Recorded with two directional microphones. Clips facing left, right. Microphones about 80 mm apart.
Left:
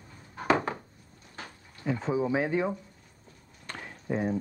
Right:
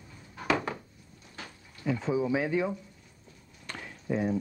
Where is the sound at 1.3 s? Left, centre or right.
Left.